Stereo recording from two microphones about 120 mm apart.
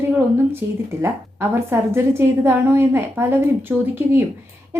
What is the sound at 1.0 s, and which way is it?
A woman's voice, 20° right (ahead or behind).